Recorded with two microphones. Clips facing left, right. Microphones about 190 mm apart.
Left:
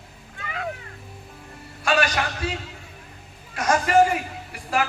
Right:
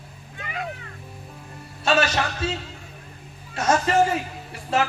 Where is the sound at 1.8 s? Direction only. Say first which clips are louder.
Right 1 dB; 25° right (ahead or behind).